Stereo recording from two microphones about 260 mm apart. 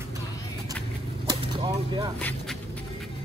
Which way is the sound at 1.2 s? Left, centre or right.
Centre.